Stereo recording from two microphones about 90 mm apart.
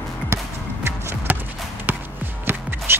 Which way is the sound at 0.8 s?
25° right (ahead or behind).